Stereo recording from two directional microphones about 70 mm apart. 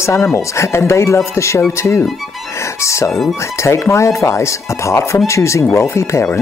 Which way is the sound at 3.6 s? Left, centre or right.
Left.